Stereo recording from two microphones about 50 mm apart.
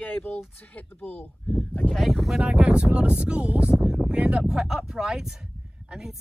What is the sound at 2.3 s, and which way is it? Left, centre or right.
Speech, centre.